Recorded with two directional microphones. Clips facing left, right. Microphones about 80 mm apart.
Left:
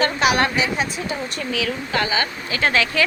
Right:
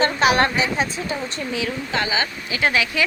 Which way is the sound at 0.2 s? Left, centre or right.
Right.